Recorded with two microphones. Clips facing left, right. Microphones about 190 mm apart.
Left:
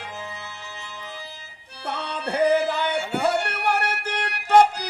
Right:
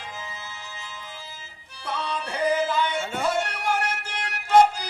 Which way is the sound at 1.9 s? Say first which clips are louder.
Left 2 dB; 65° left (ahead or behind).